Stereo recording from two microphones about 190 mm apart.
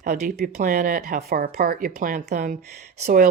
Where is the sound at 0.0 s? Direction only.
45° right (ahead or behind).